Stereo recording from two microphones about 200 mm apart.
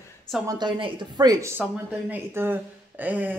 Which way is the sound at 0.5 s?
20° right (ahead or behind).